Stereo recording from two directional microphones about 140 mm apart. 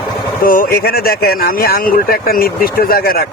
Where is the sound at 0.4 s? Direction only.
90° left.